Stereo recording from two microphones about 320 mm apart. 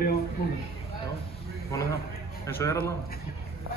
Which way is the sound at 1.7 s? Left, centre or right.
Centre.